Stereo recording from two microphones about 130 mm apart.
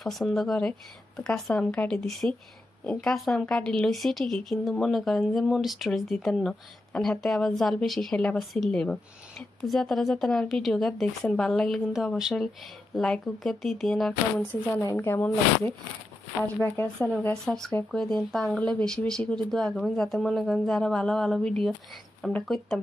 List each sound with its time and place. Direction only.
0.0 s a woman's voice: centre (ahead or behind)
14.8 s a woman's voice: 20° left (ahead or behind); by 22.8 s centre (ahead or behind)